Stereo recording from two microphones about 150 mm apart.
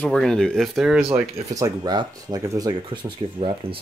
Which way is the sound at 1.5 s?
25° right (ahead or behind).